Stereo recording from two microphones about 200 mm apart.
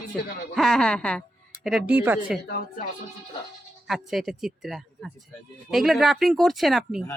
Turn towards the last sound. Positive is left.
turn(degrees=0)  # may be behind; listen again after turning